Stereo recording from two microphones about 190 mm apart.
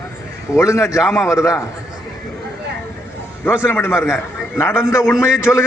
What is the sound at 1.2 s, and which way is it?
Speech, 15° left (ahead or behind).